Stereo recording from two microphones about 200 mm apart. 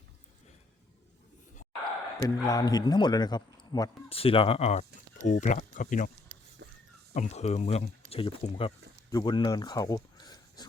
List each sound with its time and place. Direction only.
2.2 s speech: 20° left (ahead or behind); by 6.1 s 40° left (ahead or behind)
6.3 s a sound: 40° right (ahead or behind)
7.1 s speech: 35° left (ahead or behind)